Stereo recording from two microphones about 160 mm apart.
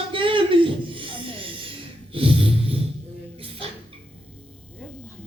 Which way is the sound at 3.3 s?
35° right (ahead or behind).